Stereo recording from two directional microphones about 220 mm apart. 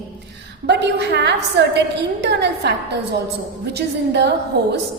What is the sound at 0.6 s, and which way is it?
A woman's voice, 50° right (ahead or behind).